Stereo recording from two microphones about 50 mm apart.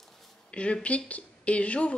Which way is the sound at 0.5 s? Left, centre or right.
Left.